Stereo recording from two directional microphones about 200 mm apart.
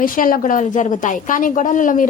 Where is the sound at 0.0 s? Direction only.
45° left (ahead or behind).